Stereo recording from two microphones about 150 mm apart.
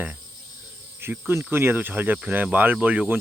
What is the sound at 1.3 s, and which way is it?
Speech, 15° right (ahead or behind).